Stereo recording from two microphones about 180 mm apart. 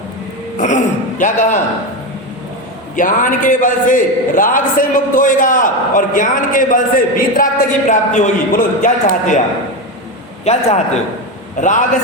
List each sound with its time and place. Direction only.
0.6 s a man's voice: 45° left (ahead or behind)
2.9 s a man's voice: 45° left (ahead or behind)
10.4 s a man's voice: 35° left (ahead or behind)